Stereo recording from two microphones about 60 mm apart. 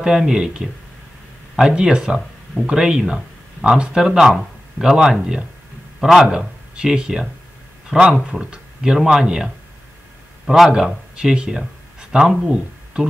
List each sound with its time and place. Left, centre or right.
0.0 s speech: centre
4.3 s a sound: centre
4.8 s a man's voice: centre